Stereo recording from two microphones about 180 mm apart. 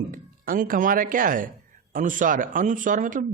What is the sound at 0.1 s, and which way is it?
Speech, 50° right (ahead or behind).